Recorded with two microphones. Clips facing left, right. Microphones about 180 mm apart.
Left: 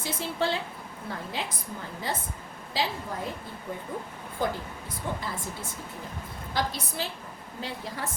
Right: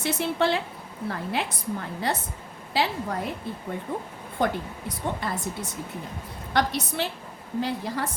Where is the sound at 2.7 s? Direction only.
70° right (ahead or behind).